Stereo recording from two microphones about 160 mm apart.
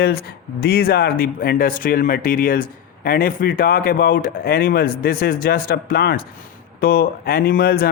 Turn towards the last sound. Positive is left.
turn(degrees=70)  # may be behind; listen again after turning